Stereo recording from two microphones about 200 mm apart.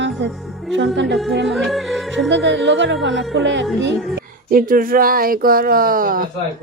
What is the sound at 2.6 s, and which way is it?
Music, 65° right (ahead or behind).